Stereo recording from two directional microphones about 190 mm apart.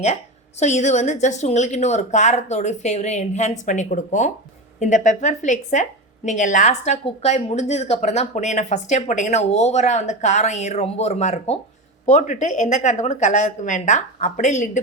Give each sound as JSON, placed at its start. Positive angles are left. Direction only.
{"t": 0.6, "sound": "a woman's voice", "side_deg": 35}